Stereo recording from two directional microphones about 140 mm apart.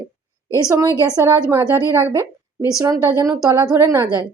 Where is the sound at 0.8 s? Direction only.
25° right (ahead or behind).